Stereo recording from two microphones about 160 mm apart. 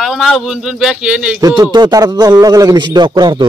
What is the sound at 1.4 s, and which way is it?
A man's voice, 25° right (ahead or behind).